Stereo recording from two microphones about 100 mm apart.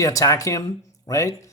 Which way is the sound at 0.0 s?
35° left (ahead or behind).